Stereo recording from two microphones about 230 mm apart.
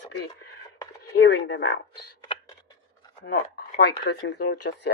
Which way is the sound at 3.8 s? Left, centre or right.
Left.